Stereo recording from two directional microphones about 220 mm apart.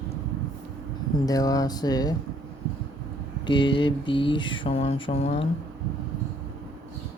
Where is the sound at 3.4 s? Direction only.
20° left (ahead or behind).